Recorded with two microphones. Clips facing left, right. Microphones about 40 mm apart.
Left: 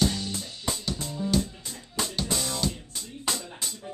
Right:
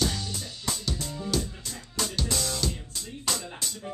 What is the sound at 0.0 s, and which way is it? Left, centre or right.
Music, centre.